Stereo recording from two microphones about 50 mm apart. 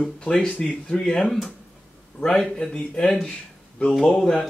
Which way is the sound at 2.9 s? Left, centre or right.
Centre.